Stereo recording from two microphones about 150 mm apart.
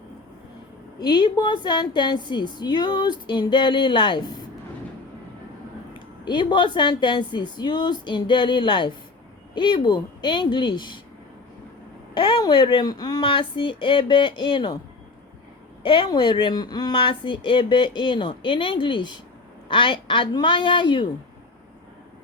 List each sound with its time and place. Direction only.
0.9 s speech: 30° left (ahead or behind)
5.9 s speech: 30° left (ahead or behind)
12.1 s speech: 30° left (ahead or behind)
15.8 s speech: 35° left (ahead or behind)